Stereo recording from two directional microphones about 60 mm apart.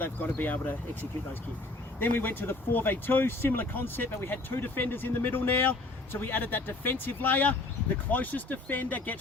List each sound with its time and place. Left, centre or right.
0.0 s speech: left
2.0 s speech: left